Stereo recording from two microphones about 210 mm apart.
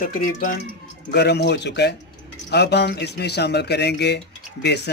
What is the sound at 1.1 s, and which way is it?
Speech, 50° left (ahead or behind).